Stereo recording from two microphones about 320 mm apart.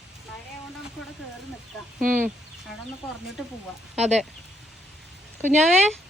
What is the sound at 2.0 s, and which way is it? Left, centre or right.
Speech, right.